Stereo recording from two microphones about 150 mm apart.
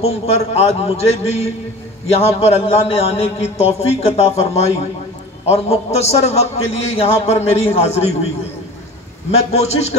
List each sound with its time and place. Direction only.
0.0 s a man's voice: 45° left (ahead or behind)
9.5 s a man's voice: 45° left (ahead or behind)